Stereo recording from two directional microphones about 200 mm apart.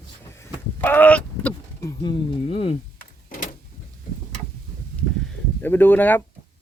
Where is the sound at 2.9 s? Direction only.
45° left (ahead or behind).